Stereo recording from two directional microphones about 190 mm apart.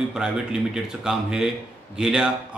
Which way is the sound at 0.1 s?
5° right (ahead or behind).